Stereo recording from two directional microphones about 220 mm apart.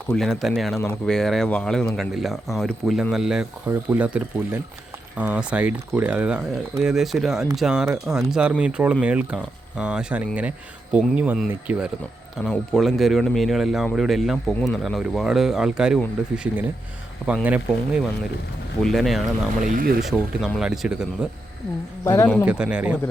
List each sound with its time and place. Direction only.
0.1 s speech: centre (ahead or behind)
19.6 s speech: 40° right (ahead or behind)
20.0 s speech: centre (ahead or behind)
22.0 s a man's voice: 10° left (ahead or behind)
22.4 s speech: 5° right (ahead or behind)